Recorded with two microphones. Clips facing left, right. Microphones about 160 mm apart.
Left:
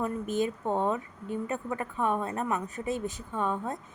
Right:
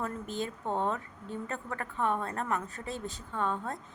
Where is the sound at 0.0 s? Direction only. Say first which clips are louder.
Left 6 dB; 15° left (ahead or behind).